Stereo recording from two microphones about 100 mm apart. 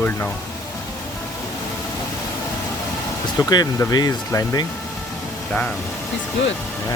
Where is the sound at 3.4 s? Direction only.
40° left (ahead or behind).